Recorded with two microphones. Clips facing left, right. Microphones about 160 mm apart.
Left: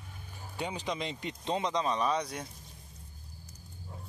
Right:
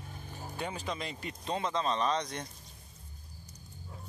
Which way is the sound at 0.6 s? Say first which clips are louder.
Left 2 dB; 15° left (ahead or behind).